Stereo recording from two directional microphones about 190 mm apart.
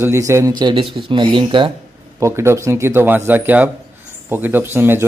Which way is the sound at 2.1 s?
15° right (ahead or behind).